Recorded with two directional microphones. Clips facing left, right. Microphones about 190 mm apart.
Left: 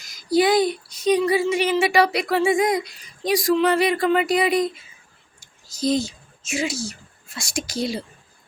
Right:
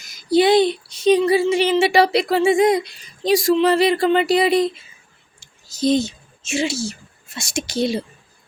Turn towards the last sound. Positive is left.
turn(degrees=-25)  # may be behind; listen again after turning